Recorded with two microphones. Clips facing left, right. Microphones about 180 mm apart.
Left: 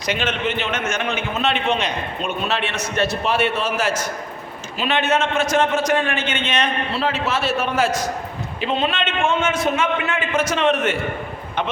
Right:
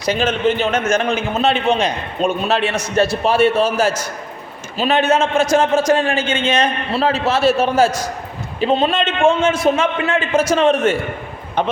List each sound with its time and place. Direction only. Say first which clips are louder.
0.0 s a man's voice: right 6 dB; 35° right (ahead or behind)